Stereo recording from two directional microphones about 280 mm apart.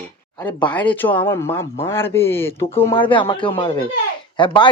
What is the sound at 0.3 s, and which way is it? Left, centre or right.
Speech, centre.